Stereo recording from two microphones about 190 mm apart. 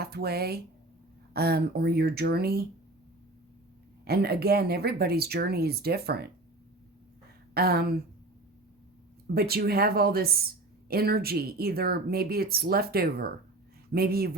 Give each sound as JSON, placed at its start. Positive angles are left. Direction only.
{"t": 0.0, "sound": "speech", "side_deg": -55}
{"t": 4.0, "sound": "speech", "side_deg": -55}
{"t": 7.5, "sound": "speech", "side_deg": -55}
{"t": 9.3, "sound": "speech", "side_deg": -55}